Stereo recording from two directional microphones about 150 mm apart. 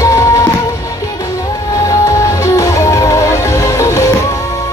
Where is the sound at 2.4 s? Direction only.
20° left (ahead or behind).